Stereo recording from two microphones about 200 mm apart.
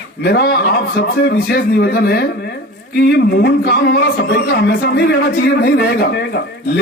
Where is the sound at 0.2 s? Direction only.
55° left (ahead or behind).